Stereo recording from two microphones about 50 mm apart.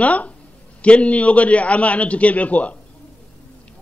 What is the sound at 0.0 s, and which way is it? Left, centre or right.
A man's voice, left.